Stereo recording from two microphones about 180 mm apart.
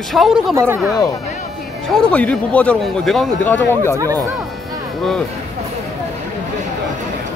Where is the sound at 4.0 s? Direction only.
20° right (ahead or behind).